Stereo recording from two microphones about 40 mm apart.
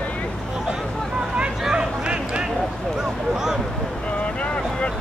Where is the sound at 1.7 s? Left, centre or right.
Right.